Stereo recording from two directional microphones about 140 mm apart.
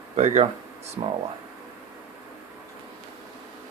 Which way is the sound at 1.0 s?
35° right (ahead or behind).